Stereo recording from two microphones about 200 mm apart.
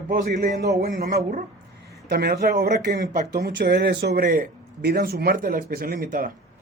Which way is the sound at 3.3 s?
55° right (ahead or behind).